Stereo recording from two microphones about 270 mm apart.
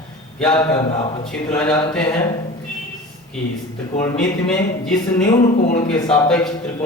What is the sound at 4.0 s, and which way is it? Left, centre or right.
A man's voice, centre.